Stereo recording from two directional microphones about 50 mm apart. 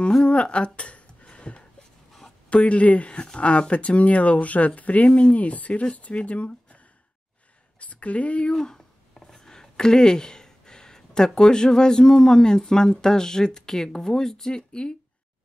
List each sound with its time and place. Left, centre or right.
0.2 s speech: left
0.7 s a sound: left
2.5 s speech: left
7.8 s speech: left
8.5 s speech: centre